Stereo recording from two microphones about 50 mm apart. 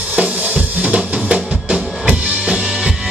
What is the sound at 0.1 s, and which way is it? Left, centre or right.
Drum, right.